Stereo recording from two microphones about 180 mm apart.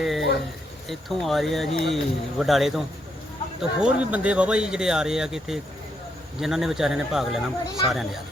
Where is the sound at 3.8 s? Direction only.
5° right (ahead or behind).